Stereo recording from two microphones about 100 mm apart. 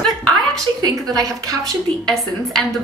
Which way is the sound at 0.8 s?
40° right (ahead or behind).